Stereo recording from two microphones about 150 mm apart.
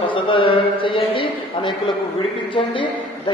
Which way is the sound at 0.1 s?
35° left (ahead or behind).